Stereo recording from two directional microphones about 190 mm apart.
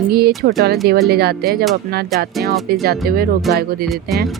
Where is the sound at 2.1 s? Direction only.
55° right (ahead or behind).